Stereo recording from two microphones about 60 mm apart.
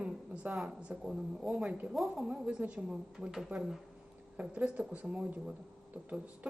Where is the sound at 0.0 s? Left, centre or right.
Centre.